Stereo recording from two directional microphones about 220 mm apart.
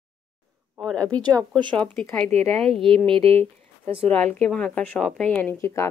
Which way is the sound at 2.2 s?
30° right (ahead or behind).